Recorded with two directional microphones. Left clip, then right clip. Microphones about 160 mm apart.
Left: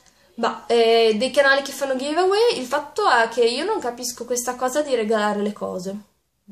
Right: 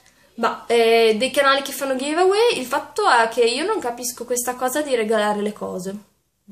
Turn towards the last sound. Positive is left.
turn(degrees=-5)  # may be behind; listen again after turning